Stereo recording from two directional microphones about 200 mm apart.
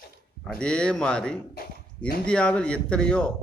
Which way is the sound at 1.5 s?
50° left (ahead or behind).